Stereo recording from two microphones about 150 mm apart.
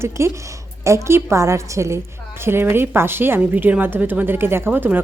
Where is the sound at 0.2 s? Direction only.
20° right (ahead or behind).